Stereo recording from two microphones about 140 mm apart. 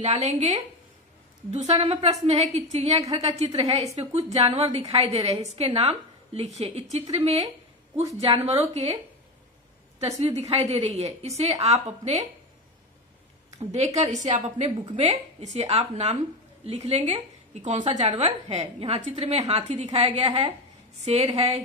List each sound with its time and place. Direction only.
0.2 s a woman's voice: 50° right (ahead or behind)
1.5 s a woman's voice: 50° right (ahead or behind)
8.5 s a woman's voice: 50° right (ahead or behind)
9.9 s a woman's voice: 50° right (ahead or behind)
13.6 s a woman's voice: 50° right (ahead or behind)
17.6 s a woman's voice: 60° right (ahead or behind)